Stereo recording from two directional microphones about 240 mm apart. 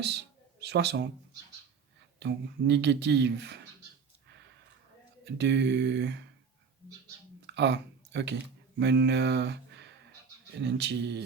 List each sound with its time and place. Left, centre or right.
0.0 s speech: right
2.1 s speech: right
5.2 s speech: right
7.4 s a sound: right
8.8 s speech: right